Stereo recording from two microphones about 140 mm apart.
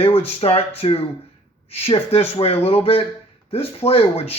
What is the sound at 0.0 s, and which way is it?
Speech, 45° left (ahead or behind).